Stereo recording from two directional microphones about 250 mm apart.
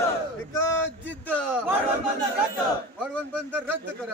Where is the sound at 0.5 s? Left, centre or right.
Centre.